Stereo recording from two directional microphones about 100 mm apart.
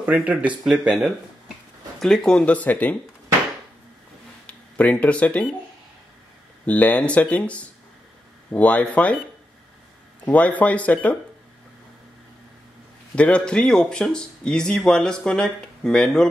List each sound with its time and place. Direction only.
0.0 s speech: 15° right (ahead or behind)
0.7 s speech: 5° right (ahead or behind); by 3.0 s 15° left (ahead or behind)
4.5 s speech: 15° left (ahead or behind)
6.6 s speech: 15° left (ahead or behind)
10.2 s speech: 15° left (ahead or behind)
13.1 s speech: 10° left (ahead or behind)